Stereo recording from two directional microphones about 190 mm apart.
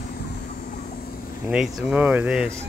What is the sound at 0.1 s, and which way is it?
Vehicle, 50° left (ahead or behind).